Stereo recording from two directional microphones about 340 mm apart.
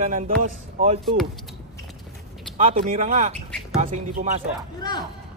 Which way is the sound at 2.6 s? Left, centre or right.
Right.